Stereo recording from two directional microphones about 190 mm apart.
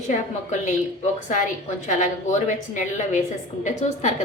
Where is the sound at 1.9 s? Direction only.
40° left (ahead or behind).